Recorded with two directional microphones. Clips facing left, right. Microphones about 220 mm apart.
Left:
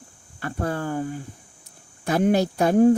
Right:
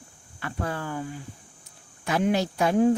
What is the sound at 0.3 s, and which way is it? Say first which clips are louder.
Speech: left 4 dB; 45° left (ahead or behind).